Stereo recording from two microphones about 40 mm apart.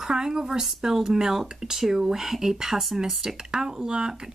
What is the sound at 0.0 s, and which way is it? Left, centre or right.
Speech, centre.